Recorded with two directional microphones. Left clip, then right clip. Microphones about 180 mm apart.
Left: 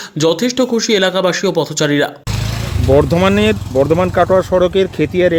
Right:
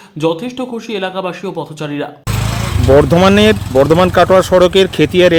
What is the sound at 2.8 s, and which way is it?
Speech, 15° right (ahead or behind).